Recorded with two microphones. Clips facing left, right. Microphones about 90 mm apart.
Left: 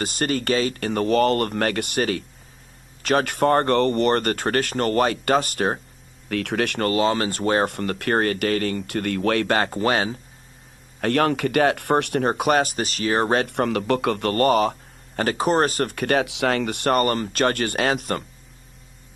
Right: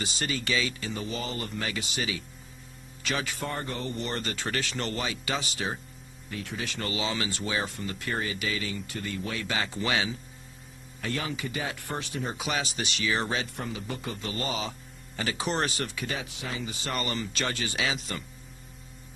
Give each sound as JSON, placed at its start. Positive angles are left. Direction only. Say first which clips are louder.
{"t": 0.0, "sound": "speech", "louder": "left 9 dB", "side_deg": 50}
{"t": 6.2, "sound": "speech", "louder": "left 12 dB", "side_deg": 70}
{"t": 11.0, "sound": "speech", "louder": "left 13 dB", "side_deg": 65}